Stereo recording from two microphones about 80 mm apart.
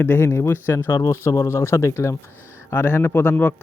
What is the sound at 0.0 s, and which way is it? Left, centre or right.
Speech, left.